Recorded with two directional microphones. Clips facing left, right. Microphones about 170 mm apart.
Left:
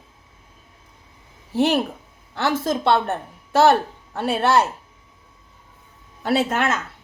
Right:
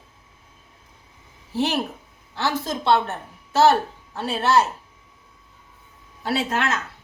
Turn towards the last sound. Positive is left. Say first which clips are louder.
# left 3 dB
turn(degrees=50)  # may be behind; listen again after turning